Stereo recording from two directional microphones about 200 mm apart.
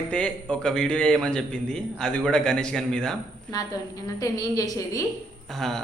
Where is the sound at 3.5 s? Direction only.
20° left (ahead or behind).